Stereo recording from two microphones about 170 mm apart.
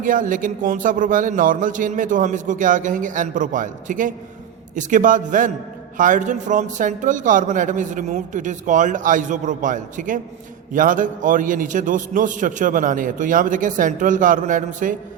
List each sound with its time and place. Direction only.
0.0 s a man's voice: 50° right (ahead or behind)